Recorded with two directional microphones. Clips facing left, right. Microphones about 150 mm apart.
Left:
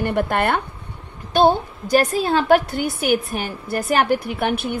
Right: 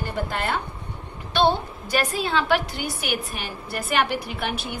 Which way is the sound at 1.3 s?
45° left (ahead or behind).